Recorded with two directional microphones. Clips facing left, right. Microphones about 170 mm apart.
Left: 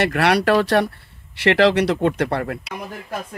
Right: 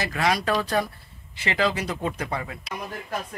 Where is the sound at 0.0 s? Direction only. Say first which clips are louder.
Left 7 dB; 70° left (ahead or behind).